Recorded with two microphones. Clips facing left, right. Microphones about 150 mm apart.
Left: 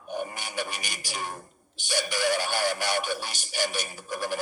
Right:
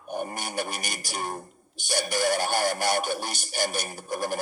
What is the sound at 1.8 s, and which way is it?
Music, 45° right (ahead or behind).